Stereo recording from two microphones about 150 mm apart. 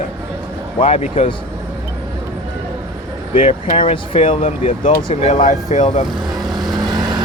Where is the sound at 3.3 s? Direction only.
60° left (ahead or behind).